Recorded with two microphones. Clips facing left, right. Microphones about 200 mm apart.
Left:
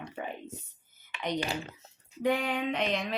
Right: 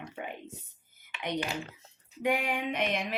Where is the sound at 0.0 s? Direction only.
15° right (ahead or behind).